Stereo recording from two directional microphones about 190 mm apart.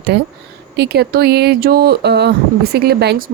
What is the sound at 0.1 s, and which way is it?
Speech, 60° right (ahead or behind).